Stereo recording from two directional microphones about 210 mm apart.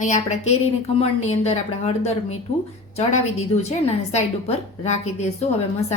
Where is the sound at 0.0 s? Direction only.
35° left (ahead or behind).